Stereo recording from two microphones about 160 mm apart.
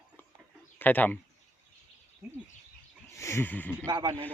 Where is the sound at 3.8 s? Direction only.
30° right (ahead or behind).